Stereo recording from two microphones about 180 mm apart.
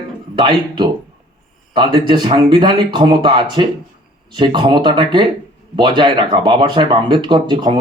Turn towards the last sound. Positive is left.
turn(degrees=-25)  # may be behind; listen again after turning